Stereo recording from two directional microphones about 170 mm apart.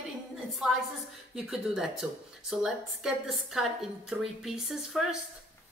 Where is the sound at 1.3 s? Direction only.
5° right (ahead or behind).